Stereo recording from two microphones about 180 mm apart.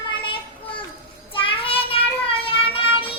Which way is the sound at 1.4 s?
30° left (ahead or behind).